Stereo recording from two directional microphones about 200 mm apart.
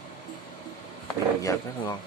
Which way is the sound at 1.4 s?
15° left (ahead or behind).